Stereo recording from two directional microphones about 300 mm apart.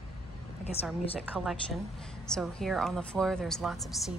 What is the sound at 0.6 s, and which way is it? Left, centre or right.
Speech, centre.